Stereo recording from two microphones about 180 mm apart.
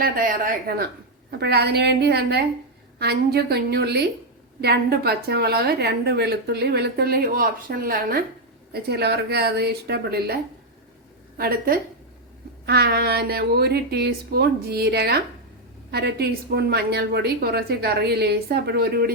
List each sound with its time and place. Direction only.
0.0 s a woman's voice: 50° right (ahead or behind)
11.3 s a woman's voice: 55° right (ahead or behind)